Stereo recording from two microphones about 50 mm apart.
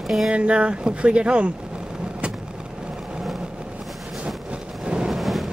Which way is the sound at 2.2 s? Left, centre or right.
Right.